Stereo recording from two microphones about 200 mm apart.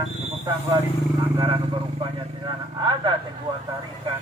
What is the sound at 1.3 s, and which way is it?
Speech, 20° right (ahead or behind).